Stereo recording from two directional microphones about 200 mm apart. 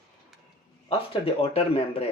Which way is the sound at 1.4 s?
30° left (ahead or behind).